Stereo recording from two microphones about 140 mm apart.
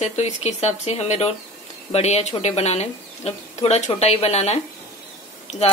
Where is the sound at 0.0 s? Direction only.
55° left (ahead or behind).